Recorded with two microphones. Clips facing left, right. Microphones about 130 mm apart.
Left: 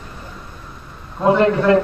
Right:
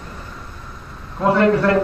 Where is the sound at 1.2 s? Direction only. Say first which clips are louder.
Left 1 dB; 20° left (ahead or behind).